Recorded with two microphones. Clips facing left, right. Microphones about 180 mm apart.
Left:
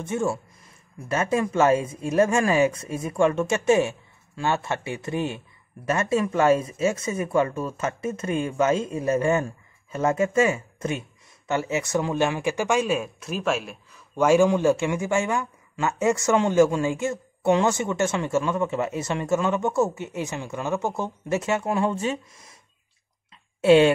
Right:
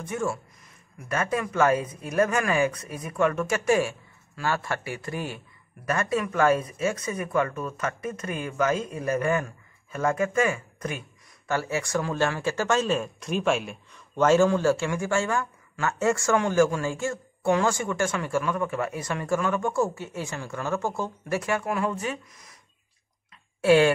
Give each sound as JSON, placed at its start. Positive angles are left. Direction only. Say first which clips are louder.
{"t": 0.0, "sound": "speech", "louder": "left 3 dB", "side_deg": 25}
{"t": 23.6, "sound": "speech", "louder": "left 3 dB", "side_deg": 20}